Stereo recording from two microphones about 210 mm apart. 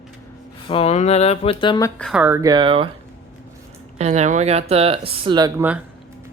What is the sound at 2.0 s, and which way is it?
Speech, 5° right (ahead or behind).